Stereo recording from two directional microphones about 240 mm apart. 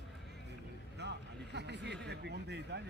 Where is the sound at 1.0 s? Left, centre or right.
Right.